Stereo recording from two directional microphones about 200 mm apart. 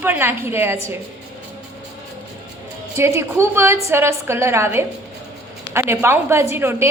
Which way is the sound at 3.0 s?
15° right (ahead or behind).